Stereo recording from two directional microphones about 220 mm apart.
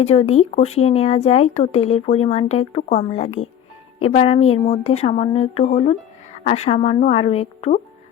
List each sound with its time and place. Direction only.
0.0 s speech: 30° left (ahead or behind)